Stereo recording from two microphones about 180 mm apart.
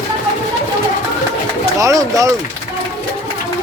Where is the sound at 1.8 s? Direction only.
20° right (ahead or behind).